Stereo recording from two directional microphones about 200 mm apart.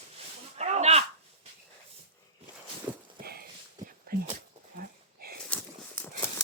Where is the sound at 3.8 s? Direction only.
45° right (ahead or behind).